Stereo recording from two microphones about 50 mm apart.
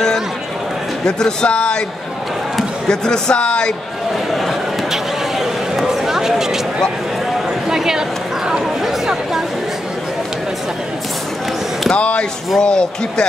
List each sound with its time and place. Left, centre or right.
1.0 s speech: centre
2.9 s speech: centre
4.3 s a sound: centre
7.6 s a sound: centre
8.5 s chatter: centre
11.9 s speech: left